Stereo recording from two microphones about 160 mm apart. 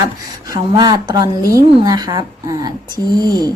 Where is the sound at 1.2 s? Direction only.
65° left (ahead or behind).